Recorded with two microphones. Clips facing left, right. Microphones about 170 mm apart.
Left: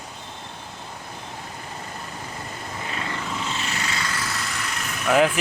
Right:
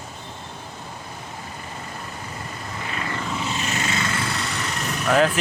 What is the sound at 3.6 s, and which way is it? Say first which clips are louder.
Vehicle: right 3 dB; 20° right (ahead or behind).